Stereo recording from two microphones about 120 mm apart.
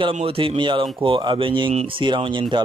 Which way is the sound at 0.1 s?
50° right (ahead or behind).